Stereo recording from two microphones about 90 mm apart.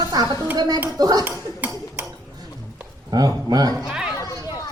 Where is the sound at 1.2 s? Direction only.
20° right (ahead or behind).